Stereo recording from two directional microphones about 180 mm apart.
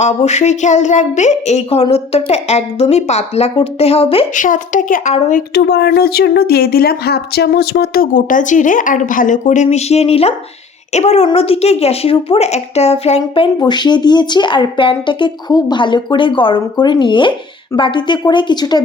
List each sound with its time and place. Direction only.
0.0 s speech: 40° left (ahead or behind)
4.4 s a woman's voice: 45° left (ahead or behind)
5.5 s speech: 65° left (ahead or behind); by 18.8 s 25° left (ahead or behind)